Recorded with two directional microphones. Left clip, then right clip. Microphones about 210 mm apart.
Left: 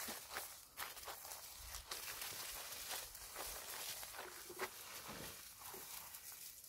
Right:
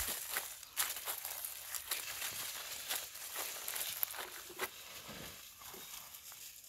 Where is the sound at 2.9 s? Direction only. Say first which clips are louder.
Right 6 dB; 55° right (ahead or behind).